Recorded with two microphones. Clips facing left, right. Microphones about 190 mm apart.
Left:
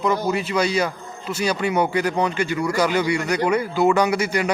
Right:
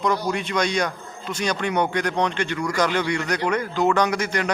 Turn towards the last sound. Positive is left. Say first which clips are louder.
# left 2 dB
turn(degrees=10)  # may be behind; listen again after turning